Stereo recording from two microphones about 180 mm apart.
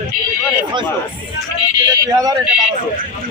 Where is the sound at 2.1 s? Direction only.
20° right (ahead or behind).